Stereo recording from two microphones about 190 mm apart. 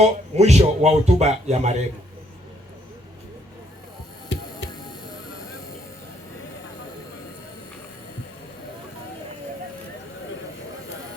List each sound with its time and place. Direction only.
0.0 s speech: 35° right (ahead or behind)
4.3 s music: 75° left (ahead or behind)